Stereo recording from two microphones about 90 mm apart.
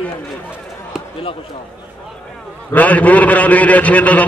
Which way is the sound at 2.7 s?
15° left (ahead or behind).